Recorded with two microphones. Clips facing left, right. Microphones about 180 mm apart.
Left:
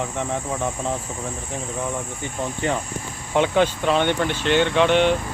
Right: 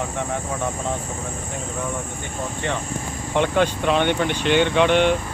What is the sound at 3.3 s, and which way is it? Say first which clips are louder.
Speech: left 1 dB; 5° left (ahead or behind).